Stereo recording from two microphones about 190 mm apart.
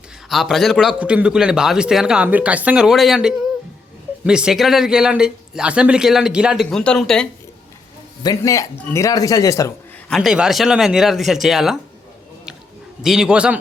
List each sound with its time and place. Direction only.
0.3 s a man's voice: centre (ahead or behind)
8.2 s a man's voice: 20° left (ahead or behind)
10.1 s a man's voice: centre (ahead or behind)
13.0 s a man's voice: 5° right (ahead or behind)